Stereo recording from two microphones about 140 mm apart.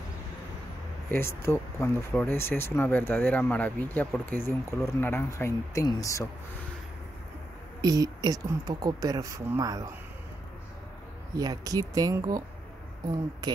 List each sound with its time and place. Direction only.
1.1 s speech: 20° left (ahead or behind)
7.8 s speech: 25° right (ahead or behind)
11.3 s speech: 25° right (ahead or behind)